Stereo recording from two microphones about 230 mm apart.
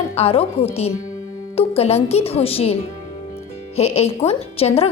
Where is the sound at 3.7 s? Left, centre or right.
Left.